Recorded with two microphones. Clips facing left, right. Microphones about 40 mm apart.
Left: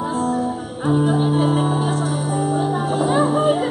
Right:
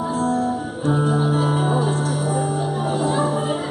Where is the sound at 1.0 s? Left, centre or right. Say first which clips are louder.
Left 1 dB; left.